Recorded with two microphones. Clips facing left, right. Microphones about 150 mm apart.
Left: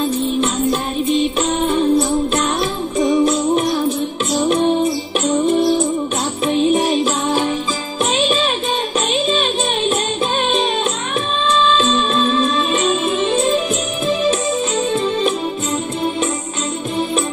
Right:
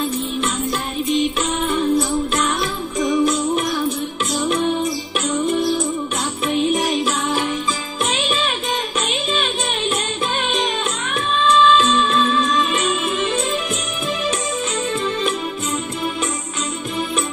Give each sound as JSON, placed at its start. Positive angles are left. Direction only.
{"t": 1.7, "sound": "music", "side_deg": 30}
{"t": 11.4, "sound": "music", "side_deg": 30}